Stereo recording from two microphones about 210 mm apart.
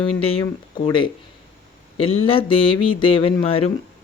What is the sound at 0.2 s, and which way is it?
Speech, 25° left (ahead or behind).